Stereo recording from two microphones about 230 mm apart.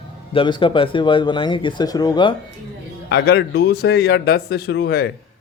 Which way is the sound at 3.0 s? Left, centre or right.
Left.